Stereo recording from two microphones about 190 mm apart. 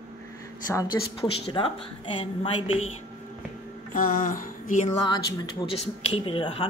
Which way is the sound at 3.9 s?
45° left (ahead or behind).